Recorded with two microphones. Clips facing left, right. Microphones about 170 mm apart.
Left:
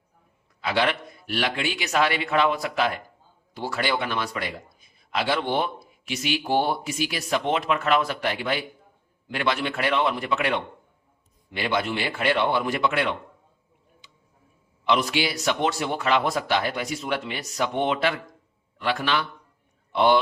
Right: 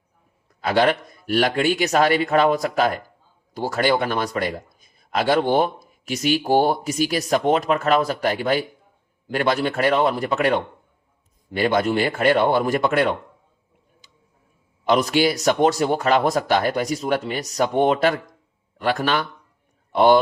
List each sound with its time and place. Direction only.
0.6 s a man's voice: 45° right (ahead or behind)
14.0 s tick-tock: 40° right (ahead or behind)
14.8 s a man's voice: 45° right (ahead or behind)